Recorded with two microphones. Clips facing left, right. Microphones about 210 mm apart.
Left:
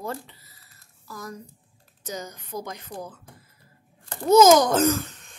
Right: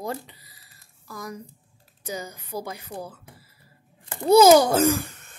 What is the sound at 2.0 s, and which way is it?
Speech, 10° right (ahead or behind).